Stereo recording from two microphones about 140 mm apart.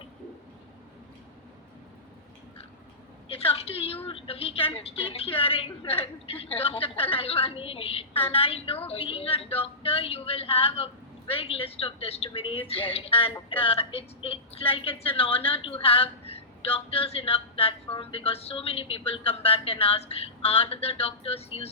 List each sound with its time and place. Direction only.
3.2 s speech: 40° left (ahead or behind)